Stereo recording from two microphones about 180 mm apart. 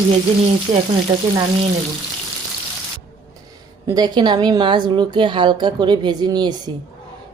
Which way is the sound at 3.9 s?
20° right (ahead or behind).